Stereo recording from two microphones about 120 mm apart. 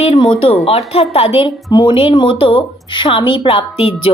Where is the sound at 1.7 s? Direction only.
40° left (ahead or behind).